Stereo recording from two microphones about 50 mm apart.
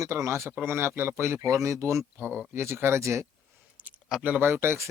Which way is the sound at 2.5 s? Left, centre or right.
Right.